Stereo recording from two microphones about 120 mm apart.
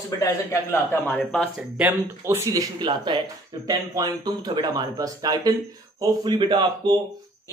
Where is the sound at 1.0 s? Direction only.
15° left (ahead or behind).